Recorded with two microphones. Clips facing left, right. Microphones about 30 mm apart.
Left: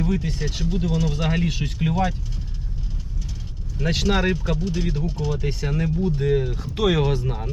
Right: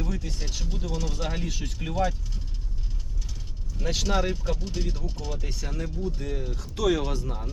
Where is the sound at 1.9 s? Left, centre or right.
Left.